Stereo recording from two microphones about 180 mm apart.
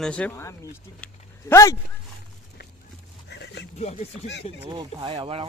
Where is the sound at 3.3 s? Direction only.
70° left (ahead or behind).